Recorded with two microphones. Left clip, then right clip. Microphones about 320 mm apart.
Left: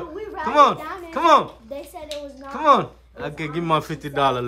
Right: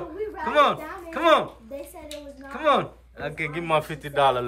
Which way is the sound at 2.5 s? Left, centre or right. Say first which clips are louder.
Left 5 dB; centre.